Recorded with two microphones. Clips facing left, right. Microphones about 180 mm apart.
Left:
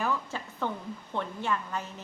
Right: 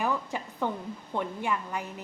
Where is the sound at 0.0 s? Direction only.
15° right (ahead or behind).